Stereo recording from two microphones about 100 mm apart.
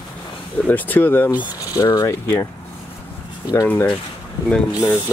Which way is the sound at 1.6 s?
35° left (ahead or behind).